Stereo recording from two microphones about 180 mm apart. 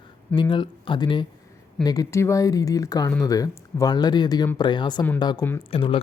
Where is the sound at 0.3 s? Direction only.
25° left (ahead or behind).